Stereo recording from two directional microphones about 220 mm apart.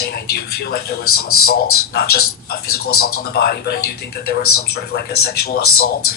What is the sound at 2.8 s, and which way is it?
Speech, 75° left (ahead or behind).